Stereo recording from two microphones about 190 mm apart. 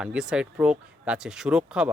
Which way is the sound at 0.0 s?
5° right (ahead or behind).